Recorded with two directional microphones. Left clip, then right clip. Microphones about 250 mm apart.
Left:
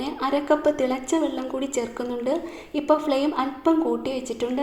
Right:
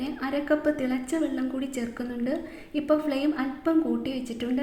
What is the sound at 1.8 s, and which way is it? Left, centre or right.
A woman's voice, left.